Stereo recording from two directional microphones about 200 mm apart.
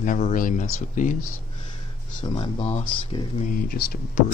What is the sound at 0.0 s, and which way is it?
Speech, 40° left (ahead or behind).